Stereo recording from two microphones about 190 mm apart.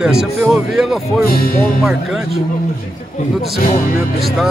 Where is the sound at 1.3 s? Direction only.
50° left (ahead or behind).